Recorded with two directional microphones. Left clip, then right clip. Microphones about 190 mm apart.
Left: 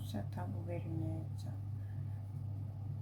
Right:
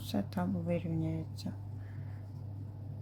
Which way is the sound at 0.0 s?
45° right (ahead or behind).